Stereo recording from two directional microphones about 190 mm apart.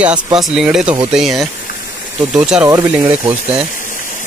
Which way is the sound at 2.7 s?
15° right (ahead or behind).